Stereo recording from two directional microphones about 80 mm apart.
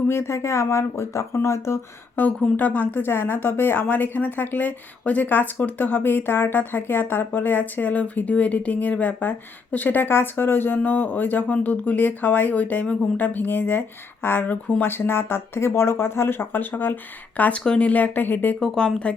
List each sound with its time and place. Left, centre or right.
0.1 s speech: left
2.1 s speech: left
18.6 s speech: centre